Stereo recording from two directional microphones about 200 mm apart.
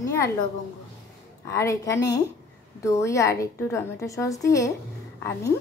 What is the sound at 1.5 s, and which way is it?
A woman's voice, 15° left (ahead or behind).